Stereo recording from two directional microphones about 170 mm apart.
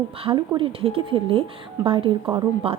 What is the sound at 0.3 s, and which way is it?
A woman's voice, 30° right (ahead or behind).